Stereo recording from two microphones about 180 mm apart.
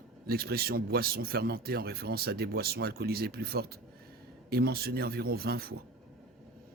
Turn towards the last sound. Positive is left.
turn(degrees=-60)  # may be behind; listen again after turning